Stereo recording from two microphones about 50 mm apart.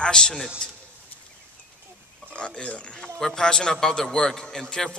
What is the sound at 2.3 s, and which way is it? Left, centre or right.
A man's voice, left.